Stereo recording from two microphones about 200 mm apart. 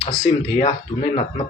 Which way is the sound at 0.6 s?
35° left (ahead or behind).